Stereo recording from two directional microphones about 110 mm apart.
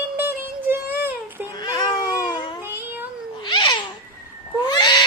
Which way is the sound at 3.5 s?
45° left (ahead or behind).